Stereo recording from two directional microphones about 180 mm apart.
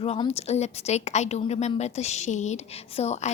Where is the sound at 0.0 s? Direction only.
35° left (ahead or behind).